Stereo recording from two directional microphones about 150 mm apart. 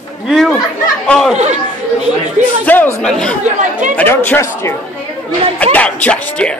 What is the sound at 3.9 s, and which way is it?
Speech, 15° left (ahead or behind).